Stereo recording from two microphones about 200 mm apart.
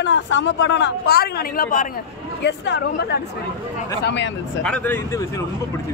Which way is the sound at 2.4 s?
60° left (ahead or behind).